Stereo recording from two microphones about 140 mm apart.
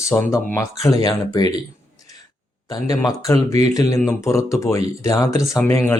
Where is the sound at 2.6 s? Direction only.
25° left (ahead or behind).